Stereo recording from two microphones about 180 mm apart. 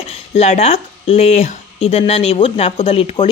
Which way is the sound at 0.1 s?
35° left (ahead or behind).